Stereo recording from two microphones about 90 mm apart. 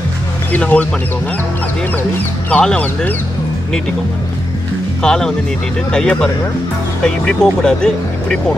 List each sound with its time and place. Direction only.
0.6 s speech: 15° left (ahead or behind)
2.5 s speech: 15° left (ahead or behind)
5.0 s speech: 5° left (ahead or behind)